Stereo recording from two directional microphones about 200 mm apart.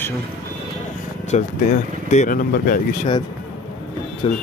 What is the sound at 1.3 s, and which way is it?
Speech, 35° left (ahead or behind).